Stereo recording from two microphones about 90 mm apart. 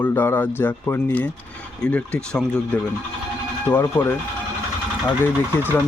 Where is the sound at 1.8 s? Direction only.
10° left (ahead or behind).